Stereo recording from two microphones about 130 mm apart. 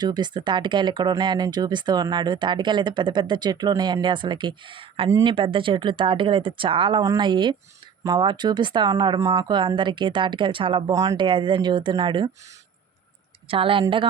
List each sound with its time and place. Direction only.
0.0 s speech: 35° right (ahead or behind)
10.9 s speech: 25° right (ahead or behind)
11.2 s speech: 40° right (ahead or behind)
13.5 s a woman's voice: 45° right (ahead or behind)